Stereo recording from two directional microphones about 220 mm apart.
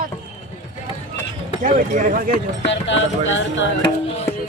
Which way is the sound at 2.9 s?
60° left (ahead or behind).